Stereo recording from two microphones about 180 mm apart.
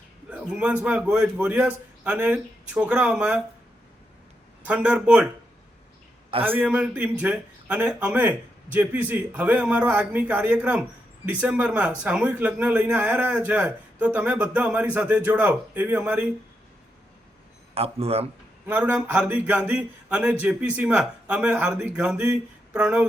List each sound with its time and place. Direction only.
0.3 s a sound: 5° right (ahead or behind)
0.9 s speech: 5° right (ahead or behind)
4.6 s speech: 5° right (ahead or behind)
6.4 s a man's voice: 10° right (ahead or behind)
17.7 s a man's voice: 35° right (ahead or behind)
18.6 s speech: 5° right (ahead or behind)